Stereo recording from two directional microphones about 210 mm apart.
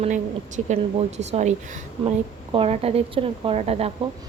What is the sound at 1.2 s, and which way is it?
A woman's voice, 30° right (ahead or behind).